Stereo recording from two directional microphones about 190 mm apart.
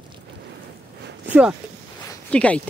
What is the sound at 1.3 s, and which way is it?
Speech, 10° right (ahead or behind).